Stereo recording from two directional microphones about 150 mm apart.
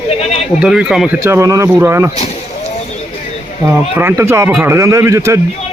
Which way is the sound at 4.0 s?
15° right (ahead or behind).